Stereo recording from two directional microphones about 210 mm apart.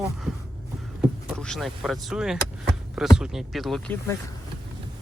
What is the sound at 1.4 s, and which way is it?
Speech, centre (ahead or behind).